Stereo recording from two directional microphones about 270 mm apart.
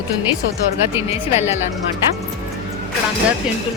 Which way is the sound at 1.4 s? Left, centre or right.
Left.